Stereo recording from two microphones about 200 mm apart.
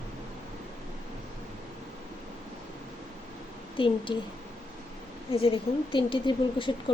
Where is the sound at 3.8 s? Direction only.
25° left (ahead or behind).